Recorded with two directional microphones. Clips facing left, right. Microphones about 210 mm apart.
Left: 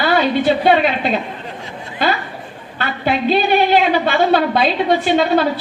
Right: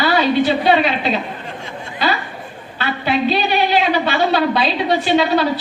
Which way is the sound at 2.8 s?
50° left (ahead or behind).